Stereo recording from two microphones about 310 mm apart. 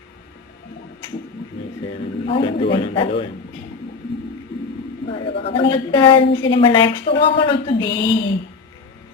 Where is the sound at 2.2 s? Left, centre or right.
Centre.